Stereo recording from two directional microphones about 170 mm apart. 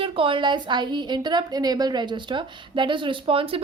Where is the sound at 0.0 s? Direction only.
30° right (ahead or behind).